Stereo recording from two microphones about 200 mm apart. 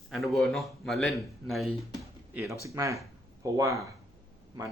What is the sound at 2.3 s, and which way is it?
Speech, 15° right (ahead or behind).